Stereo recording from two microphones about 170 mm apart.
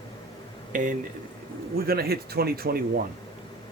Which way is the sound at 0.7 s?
50° right (ahead or behind).